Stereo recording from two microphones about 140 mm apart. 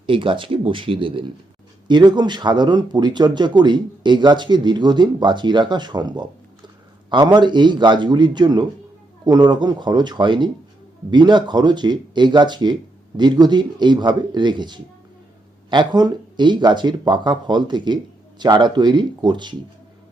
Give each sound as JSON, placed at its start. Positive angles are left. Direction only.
{"t": 0.0, "sound": "speech", "side_deg": -35}